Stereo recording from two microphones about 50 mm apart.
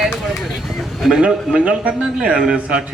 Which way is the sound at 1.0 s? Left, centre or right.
Centre.